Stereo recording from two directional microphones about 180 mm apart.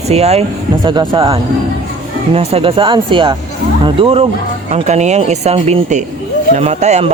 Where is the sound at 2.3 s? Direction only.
35° right (ahead or behind).